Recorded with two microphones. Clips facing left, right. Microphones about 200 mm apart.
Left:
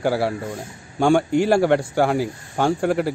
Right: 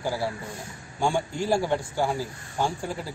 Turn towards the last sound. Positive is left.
turn(degrees=70)  # may be behind; listen again after turning